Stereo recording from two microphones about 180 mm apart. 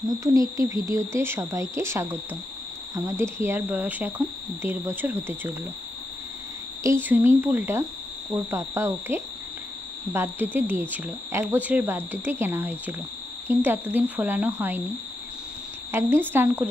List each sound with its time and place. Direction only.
0.1 s speech: 20° right (ahead or behind)
6.8 s speech: 15° right (ahead or behind)
15.9 s speech: 15° right (ahead or behind)